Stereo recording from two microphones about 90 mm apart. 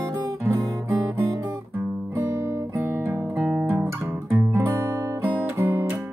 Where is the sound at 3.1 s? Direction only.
10° right (ahead or behind).